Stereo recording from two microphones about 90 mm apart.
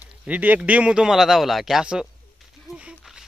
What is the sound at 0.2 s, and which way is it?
A man's voice, 15° right (ahead or behind).